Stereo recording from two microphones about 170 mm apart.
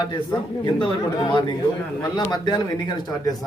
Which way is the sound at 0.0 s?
25° left (ahead or behind).